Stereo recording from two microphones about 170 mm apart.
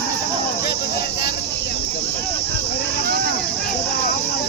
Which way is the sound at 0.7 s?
75° left (ahead or behind).